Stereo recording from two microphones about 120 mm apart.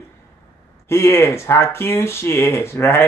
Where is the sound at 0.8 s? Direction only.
20° left (ahead or behind).